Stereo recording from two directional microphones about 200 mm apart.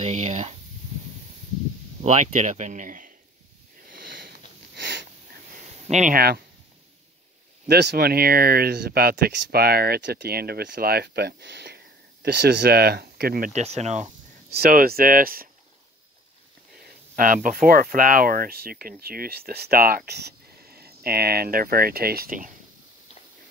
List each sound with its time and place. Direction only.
0.0 s speech: 35° right (ahead or behind)
2.0 s speech: 35° right (ahead or behind)
3.9 s sniff: 45° right (ahead or behind)
5.5 s a sound: 35° right (ahead or behind)
7.6 s speech: 55° right (ahead or behind)
13.5 s speech: 35° right (ahead or behind)
14.5 s speech: 45° right (ahead or behind)
16.8 s speech: 45° right (ahead or behind)